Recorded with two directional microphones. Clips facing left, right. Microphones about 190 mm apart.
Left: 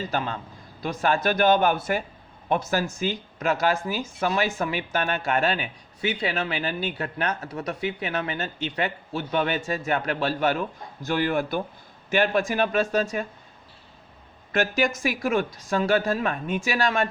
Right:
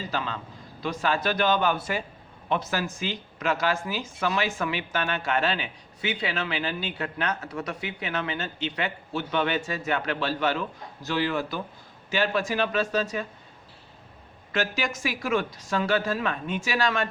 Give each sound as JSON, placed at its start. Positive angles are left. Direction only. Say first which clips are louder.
{"t": 0.1, "sound": "speech", "louder": "left 3 dB", "side_deg": 50}
{"t": 14.5, "sound": "speech", "louder": "left 5 dB", "side_deg": 50}